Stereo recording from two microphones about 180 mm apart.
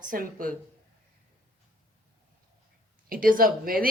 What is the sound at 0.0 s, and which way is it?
Speech, 50° right (ahead or behind).